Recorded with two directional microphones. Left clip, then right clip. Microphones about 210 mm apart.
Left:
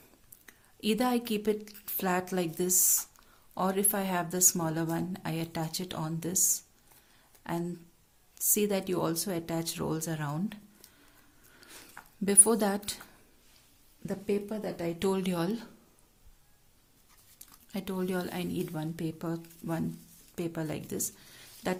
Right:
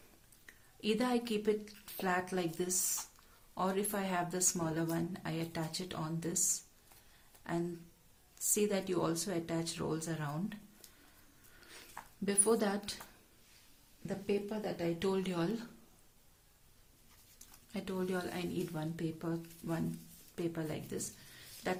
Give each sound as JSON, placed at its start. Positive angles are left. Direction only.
{"t": 0.4, "sound": "a woman's voice", "side_deg": 45}
{"t": 11.6, "sound": "a sound", "side_deg": 45}
{"t": 12.2, "sound": "a woman's voice", "side_deg": 50}
{"t": 14.1, "sound": "a woman's voice", "side_deg": 55}
{"t": 17.7, "sound": "a woman's voice", "side_deg": 45}